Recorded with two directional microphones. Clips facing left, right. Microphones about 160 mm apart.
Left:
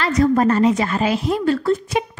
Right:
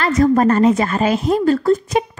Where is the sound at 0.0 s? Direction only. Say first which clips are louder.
Right 2 dB; 45° right (ahead or behind).